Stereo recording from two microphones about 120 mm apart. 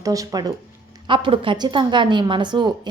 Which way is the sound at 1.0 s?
45° right (ahead or behind).